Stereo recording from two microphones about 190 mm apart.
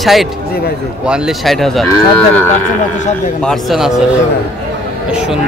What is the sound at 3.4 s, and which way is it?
Speech, centre (ahead or behind).